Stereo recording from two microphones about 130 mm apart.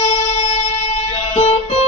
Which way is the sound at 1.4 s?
55° left (ahead or behind).